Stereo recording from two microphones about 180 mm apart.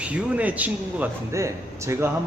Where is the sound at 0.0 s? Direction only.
5° right (ahead or behind).